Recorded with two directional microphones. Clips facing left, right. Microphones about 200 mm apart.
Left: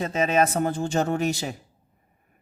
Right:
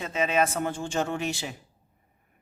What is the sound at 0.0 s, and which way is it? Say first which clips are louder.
Speech: left 3 dB; 40° left (ahead or behind).